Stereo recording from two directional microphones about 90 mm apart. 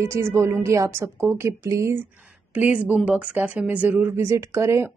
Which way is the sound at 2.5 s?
15° right (ahead or behind).